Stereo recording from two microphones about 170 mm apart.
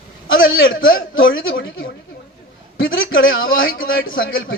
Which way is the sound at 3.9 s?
75° left (ahead or behind).